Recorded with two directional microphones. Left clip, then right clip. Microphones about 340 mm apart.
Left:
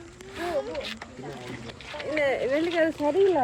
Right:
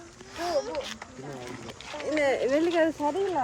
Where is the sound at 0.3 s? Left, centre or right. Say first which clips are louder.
Right 1 dB; centre.